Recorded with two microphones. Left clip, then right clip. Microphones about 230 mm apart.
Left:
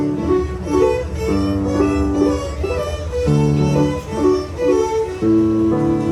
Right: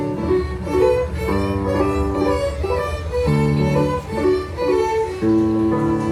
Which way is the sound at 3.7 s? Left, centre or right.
Left.